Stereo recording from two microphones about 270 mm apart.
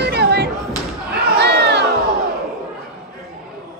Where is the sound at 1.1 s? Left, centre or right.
Right.